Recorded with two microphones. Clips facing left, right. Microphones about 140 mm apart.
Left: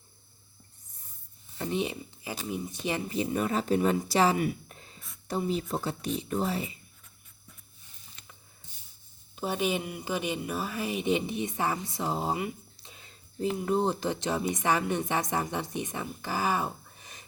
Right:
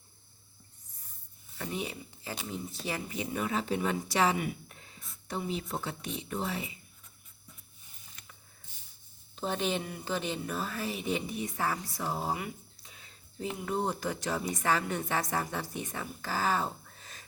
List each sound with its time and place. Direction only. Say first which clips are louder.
1.5 s speech: left 6 dB; 25° left (ahead or behind)
3.1 s speech: left 4 dB; 35° left (ahead or behind)
8.2 s a sound: left 1 dB; 25° left (ahead or behind)
9.3 s a woman's voice: left 2 dB; 10° left (ahead or behind)